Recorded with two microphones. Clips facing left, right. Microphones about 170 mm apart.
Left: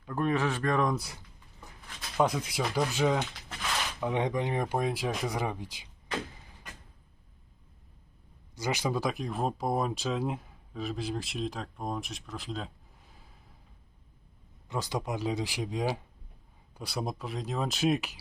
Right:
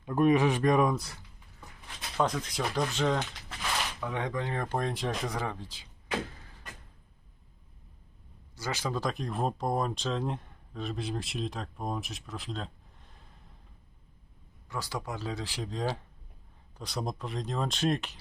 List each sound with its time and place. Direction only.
0.0 s speech: 15° right (ahead or behind)
2.1 s speech: 10° left (ahead or behind)
4.0 s speech: 20° left (ahead or behind)
8.5 s speech: 15° left (ahead or behind)
14.7 s speech: 20° left (ahead or behind)